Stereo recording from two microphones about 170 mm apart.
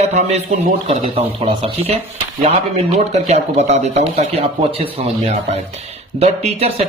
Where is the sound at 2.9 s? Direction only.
40° right (ahead or behind).